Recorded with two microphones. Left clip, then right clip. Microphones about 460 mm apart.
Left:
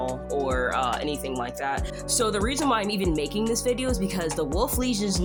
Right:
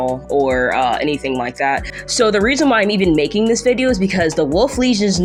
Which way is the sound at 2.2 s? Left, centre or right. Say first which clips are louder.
Right 12 dB; left.